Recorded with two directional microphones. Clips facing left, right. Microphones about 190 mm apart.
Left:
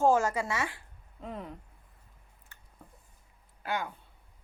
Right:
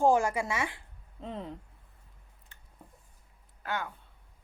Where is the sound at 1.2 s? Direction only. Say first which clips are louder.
Right 1 dB; 25° right (ahead or behind).